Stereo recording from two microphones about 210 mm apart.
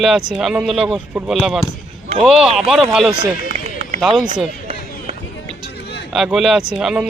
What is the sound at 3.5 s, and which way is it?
Run, 30° right (ahead or behind).